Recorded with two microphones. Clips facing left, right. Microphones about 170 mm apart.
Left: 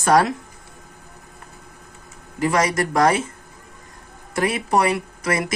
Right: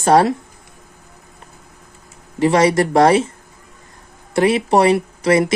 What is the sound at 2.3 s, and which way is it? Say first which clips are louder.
Speech: right 6 dB; 30° right (ahead or behind).